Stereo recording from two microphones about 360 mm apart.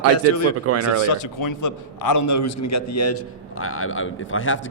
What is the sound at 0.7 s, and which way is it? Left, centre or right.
Speech, right.